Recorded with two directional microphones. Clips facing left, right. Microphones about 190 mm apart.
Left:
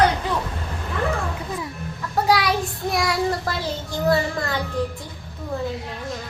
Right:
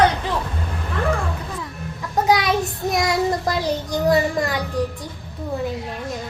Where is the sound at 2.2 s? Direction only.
20° right (ahead or behind).